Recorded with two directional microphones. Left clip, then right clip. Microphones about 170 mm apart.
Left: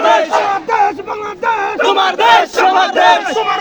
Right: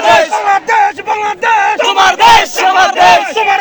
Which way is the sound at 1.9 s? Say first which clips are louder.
Right 4 dB; 15° right (ahead or behind).